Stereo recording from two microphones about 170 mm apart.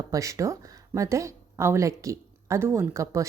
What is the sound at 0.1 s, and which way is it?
A woman's voice, 20° right (ahead or behind).